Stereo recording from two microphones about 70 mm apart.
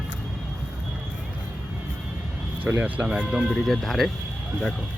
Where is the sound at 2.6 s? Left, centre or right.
Right.